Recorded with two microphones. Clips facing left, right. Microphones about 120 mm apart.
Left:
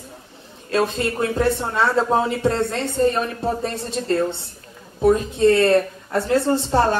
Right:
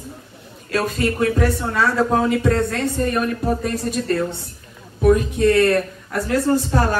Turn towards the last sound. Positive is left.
turn(degrees=25)  # may be behind; listen again after turning